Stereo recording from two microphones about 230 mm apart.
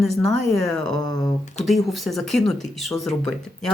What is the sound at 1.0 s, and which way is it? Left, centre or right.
Speech, centre.